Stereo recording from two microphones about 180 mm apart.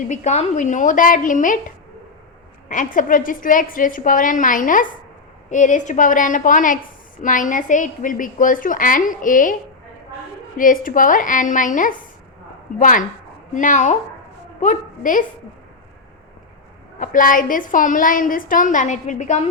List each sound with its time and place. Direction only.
0.1 s a woman's voice: 40° left (ahead or behind)
2.6 s a woman's voice: 45° left (ahead or behind)
10.6 s a woman's voice: 50° left (ahead or behind)
17.0 s a woman's voice: 50° left (ahead or behind)